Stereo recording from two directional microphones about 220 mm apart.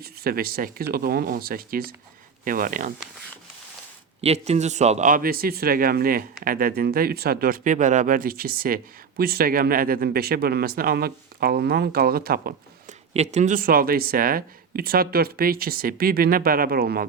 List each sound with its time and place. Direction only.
0.0 s speech: 45° right (ahead or behind)
4.2 s speech: 30° right (ahead or behind)
13.1 s speech: 30° right (ahead or behind)